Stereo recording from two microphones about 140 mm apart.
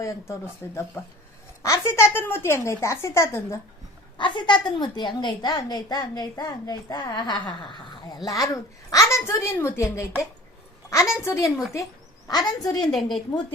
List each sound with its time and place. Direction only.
0.0 s a woman's voice: 20° left (ahead or behind)
4.2 s a woman's voice: 35° left (ahead or behind)
11.2 s a woman's voice: 20° left (ahead or behind)
11.4 s a woman's voice: centre (ahead or behind)
12.3 s a woman's voice: 30° left (ahead or behind)
12.8 s a woman's voice: centre (ahead or behind)